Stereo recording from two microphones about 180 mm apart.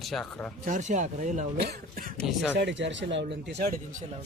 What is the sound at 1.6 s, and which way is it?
Speech, 60° right (ahead or behind).